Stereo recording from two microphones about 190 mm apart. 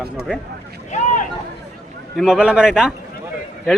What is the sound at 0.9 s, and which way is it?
Speech, 40° left (ahead or behind).